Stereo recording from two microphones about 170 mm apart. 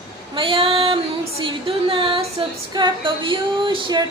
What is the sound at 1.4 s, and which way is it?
Speech, 30° right (ahead or behind).